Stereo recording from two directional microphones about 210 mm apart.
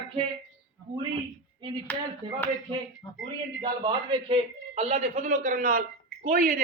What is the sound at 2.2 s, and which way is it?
Speech, 20° right (ahead or behind).